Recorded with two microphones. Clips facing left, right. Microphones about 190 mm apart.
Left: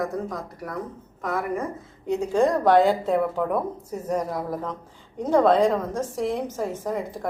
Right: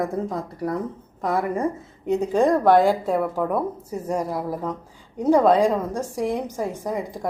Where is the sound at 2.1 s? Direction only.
15° right (ahead or behind).